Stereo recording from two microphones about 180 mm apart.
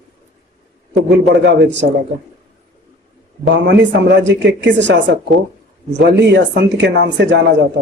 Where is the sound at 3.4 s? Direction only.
85° right.